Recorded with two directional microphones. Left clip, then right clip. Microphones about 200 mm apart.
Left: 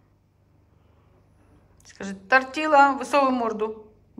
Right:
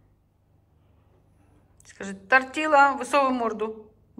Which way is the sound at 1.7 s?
5° left (ahead or behind).